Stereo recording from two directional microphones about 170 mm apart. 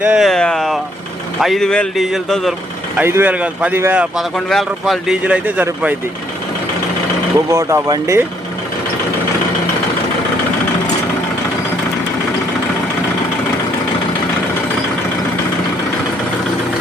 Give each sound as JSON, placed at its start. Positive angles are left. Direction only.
{"t": 0.0, "sound": "a man's voice", "side_deg": -5}
{"t": 3.0, "sound": "speech", "side_deg": -10}
{"t": 7.5, "sound": "speech", "side_deg": -15}